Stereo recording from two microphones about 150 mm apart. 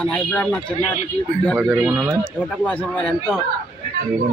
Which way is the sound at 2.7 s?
10° left (ahead or behind).